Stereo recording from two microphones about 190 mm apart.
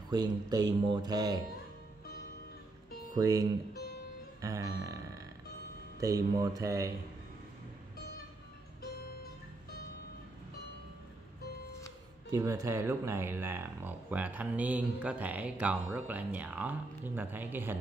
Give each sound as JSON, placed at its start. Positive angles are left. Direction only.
{"t": 0.1, "sound": "mantra", "side_deg": -20}
{"t": 3.2, "sound": "speech", "side_deg": -20}
{"t": 12.3, "sound": "speech", "side_deg": -15}